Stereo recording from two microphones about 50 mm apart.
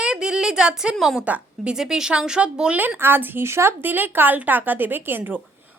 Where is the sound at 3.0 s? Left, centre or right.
Right.